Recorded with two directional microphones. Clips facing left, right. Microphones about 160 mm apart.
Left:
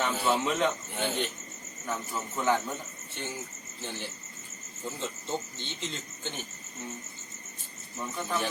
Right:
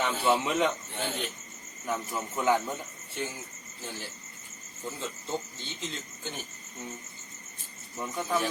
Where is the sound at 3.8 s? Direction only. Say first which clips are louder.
Left 1 dB; centre (ahead or behind).